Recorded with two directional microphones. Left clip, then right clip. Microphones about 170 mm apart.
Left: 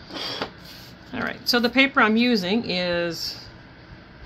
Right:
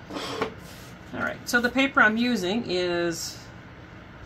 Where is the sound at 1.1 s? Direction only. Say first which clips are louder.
Left 2 dB; 45° left (ahead or behind).